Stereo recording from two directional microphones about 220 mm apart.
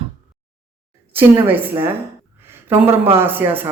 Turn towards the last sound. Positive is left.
turn(degrees=-10)  # may be behind; listen again after turning